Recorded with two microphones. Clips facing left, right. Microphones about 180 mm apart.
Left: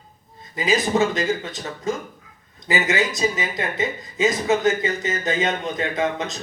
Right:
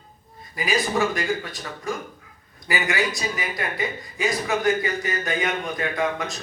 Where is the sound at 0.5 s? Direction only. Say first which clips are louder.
Left 3 dB; 20° left (ahead or behind).